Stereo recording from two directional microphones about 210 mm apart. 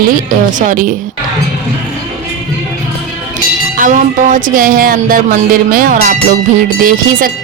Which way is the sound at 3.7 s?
40° right (ahead or behind).